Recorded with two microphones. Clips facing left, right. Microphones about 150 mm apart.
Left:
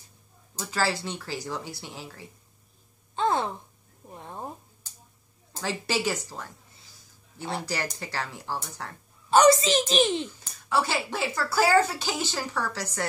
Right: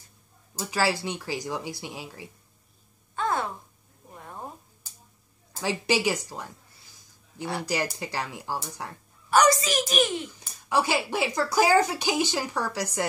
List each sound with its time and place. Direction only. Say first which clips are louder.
0.6 s speech: right 2 dB; 10° right (ahead or behind)
3.2 s a sound: left 2 dB; 25° left (ahead or behind)
5.6 s speech: right 3 dB; 15° right (ahead or behind)
7.6 s speech: right 3 dB; 15° right (ahead or behind)
9.3 s a child's voice: left 3 dB; 25° left (ahead or behind)
10.4 s speech: right 4 dB; 10° right (ahead or behind)